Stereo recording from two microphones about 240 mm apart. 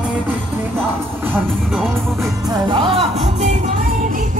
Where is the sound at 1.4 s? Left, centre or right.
Centre.